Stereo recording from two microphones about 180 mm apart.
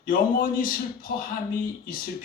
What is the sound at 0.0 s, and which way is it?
A man's voice, 50° left (ahead or behind).